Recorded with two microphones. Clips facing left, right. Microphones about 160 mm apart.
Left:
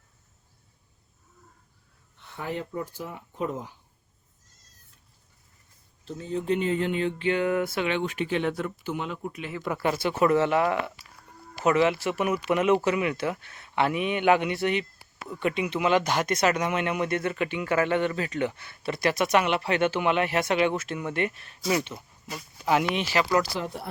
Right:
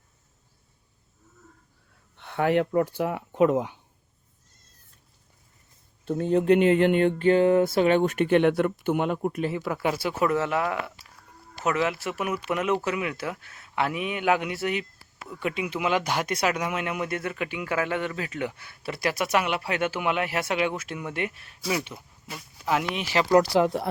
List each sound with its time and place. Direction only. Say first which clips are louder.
2.1 s speech: right 10 dB; 70° right (ahead or behind)
6.1 s speech: right 7 dB; 65° right (ahead or behind)
7.3 s a sound: right 6 dB; 30° right (ahead or behind)
7.9 s speech: right 7 dB; 45° right (ahead or behind)
9.6 s speech: even; 5° right (ahead or behind)
23.4 s speech: right 8 dB; 80° right